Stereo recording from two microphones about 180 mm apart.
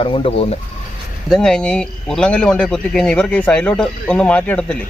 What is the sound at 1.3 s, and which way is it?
Speech, 5° left (ahead or behind).